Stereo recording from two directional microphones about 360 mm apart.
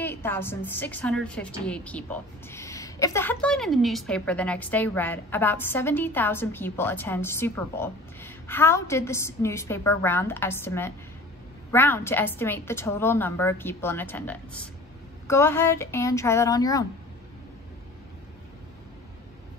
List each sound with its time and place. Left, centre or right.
0.0 s a woman's voice: centre